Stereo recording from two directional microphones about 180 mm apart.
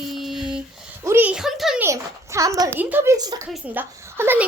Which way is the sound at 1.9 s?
15° right (ahead or behind).